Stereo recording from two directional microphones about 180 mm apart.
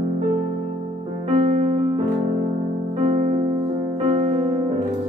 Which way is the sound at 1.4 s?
35° right (ahead or behind).